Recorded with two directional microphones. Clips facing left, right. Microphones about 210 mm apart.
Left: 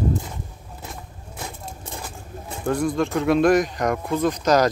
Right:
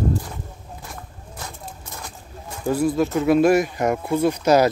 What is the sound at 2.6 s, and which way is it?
Speech, 5° right (ahead or behind).